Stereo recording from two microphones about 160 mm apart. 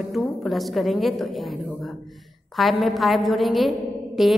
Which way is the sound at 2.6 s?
Centre (ahead or behind).